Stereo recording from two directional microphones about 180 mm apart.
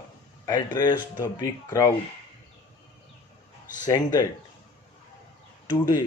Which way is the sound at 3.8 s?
20° left (ahead or behind).